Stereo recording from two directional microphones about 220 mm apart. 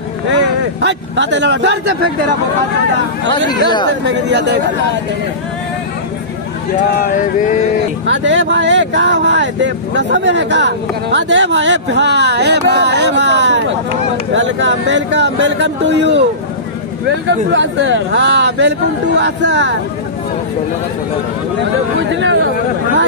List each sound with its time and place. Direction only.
0.3 s speech: 55° right (ahead or behind)
3.3 s speech: 20° left (ahead or behind)
4.0 s speech: 50° right (ahead or behind)
7.2 s a sound: 35° left (ahead or behind)
8.1 s speech: 55° right (ahead or behind)
17.3 s speech: 55° right (ahead or behind)
22.1 s speech: 55° right (ahead or behind)